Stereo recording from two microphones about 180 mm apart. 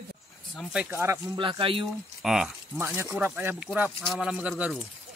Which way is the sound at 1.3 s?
25° right (ahead or behind).